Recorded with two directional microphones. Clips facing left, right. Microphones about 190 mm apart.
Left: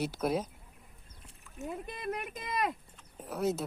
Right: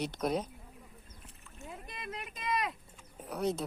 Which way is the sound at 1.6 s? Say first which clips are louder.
Left 8 dB; 55° left (ahead or behind).